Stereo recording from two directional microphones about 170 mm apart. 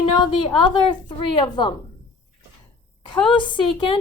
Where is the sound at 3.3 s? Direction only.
30° left (ahead or behind).